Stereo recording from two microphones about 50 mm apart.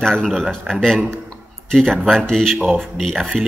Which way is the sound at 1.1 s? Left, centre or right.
Centre.